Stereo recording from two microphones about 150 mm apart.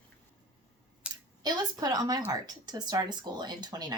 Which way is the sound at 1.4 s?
25° right (ahead or behind).